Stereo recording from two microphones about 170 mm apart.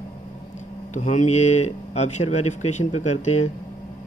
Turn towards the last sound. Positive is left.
turn(degrees=40)  # may be behind; listen again after turning